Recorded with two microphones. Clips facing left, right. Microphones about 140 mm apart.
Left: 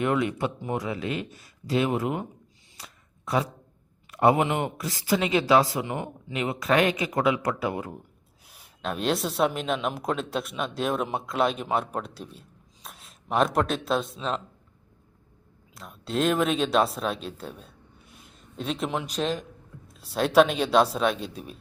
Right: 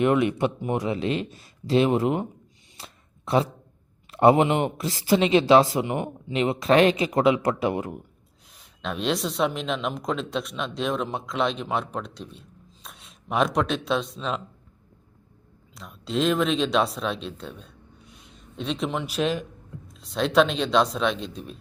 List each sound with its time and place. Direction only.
0.0 s speech: 20° right (ahead or behind)
2.7 s a sound: 25° right (ahead or behind)
4.1 s speech: 25° right (ahead or behind)
8.4 s a man's voice: 5° left (ahead or behind)
15.7 s a man's voice: centre (ahead or behind)